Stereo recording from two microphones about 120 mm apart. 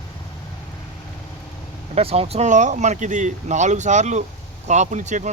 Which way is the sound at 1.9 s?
55° right (ahead or behind).